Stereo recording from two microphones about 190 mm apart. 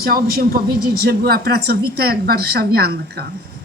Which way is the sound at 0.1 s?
55° right (ahead or behind).